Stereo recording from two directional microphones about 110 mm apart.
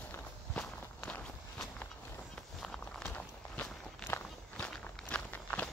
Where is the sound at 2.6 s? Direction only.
5° left (ahead or behind).